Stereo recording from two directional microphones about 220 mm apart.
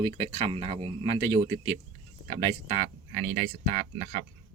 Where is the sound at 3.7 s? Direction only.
40° right (ahead or behind).